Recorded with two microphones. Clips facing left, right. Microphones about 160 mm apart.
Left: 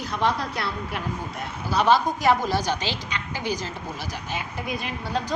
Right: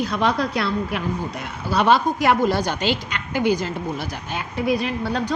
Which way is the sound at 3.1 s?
55° right (ahead or behind).